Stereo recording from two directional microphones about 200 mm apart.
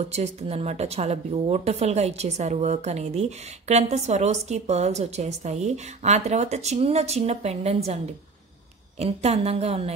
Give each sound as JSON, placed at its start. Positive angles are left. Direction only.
{"t": 0.1, "sound": "a woman's voice", "side_deg": -30}
{"t": 9.0, "sound": "a woman's voice", "side_deg": -30}